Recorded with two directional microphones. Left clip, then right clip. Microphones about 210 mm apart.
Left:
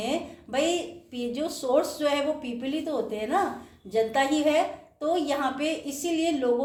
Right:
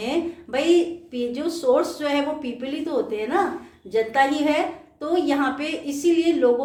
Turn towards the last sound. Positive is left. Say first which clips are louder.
# right 7 dB
turn(degrees=-15)  # may be behind; listen again after turning